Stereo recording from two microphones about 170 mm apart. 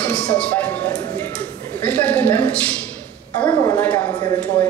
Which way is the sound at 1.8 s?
10° left (ahead or behind).